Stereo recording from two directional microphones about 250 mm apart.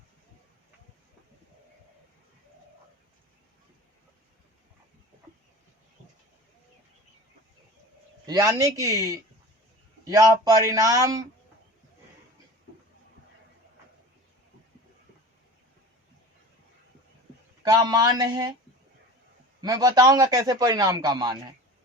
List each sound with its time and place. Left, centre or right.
8.3 s speech: centre
17.6 s speech: centre
19.6 s speech: centre